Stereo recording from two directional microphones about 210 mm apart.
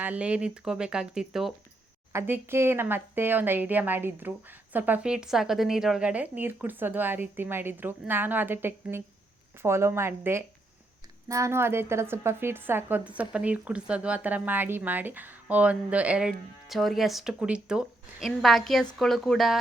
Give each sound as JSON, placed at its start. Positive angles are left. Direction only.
{"t": 0.0, "sound": "a woman's voice", "side_deg": -5}